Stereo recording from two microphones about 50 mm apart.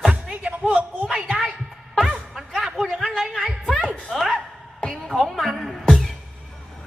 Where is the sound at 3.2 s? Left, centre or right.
Centre.